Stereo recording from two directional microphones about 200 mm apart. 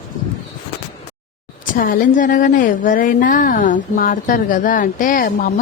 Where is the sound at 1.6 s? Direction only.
45° left (ahead or behind).